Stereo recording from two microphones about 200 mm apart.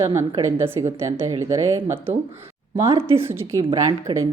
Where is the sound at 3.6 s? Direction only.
25° right (ahead or behind).